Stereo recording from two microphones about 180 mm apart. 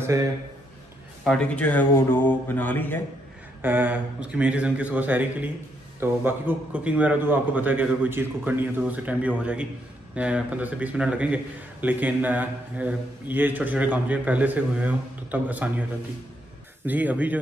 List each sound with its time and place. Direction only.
0.0 s a man's voice: 15° right (ahead or behind)
1.2 s speech: 5° left (ahead or behind)
3.6 s speech: 10° right (ahead or behind)
16.8 s speech: 10° right (ahead or behind)